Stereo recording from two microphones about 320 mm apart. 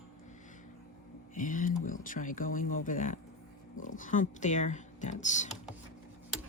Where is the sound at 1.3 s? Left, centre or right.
Left.